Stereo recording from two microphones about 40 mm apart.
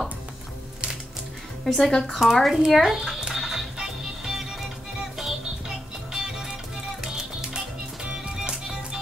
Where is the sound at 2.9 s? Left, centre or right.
Centre.